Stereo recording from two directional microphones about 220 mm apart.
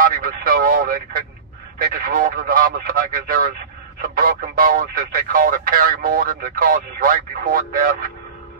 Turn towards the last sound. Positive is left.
turn(degrees=-40)  # may be behind; listen again after turning